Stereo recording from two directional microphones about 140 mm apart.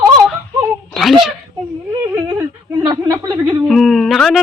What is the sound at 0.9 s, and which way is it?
Speech, centre (ahead or behind).